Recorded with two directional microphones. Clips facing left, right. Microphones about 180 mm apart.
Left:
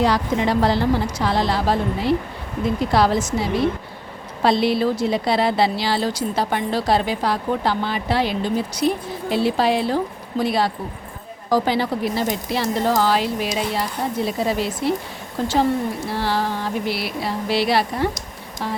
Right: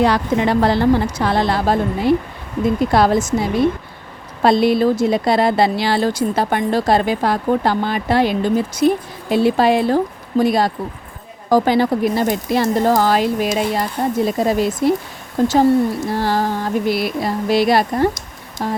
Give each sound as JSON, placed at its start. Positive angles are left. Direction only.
{"t": 0.0, "sound": "a woman's voice", "side_deg": -60}